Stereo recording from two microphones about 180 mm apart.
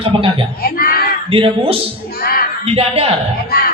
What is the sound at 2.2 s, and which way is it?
Speech, 55° left (ahead or behind).